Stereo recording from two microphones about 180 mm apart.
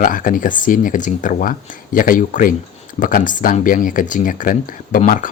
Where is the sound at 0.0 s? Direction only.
50° left (ahead or behind).